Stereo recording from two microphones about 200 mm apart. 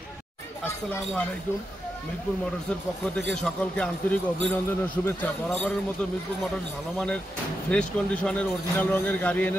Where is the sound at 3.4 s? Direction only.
5° left (ahead or behind).